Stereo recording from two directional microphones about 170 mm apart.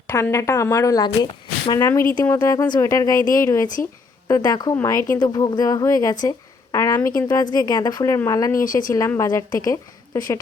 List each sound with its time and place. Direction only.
0.1 s speech: 15° left (ahead or behind)
1.8 s speech: 15° left (ahead or behind)
6.2 s a sound: 20° left (ahead or behind)
7.2 s speech: 20° left (ahead or behind)